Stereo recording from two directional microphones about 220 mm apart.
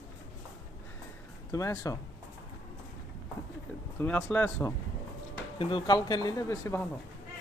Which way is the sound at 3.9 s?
5° left (ahead or behind).